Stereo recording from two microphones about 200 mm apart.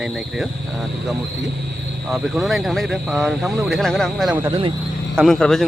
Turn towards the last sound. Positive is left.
turn(degrees=0)  # may be behind; listen again after turning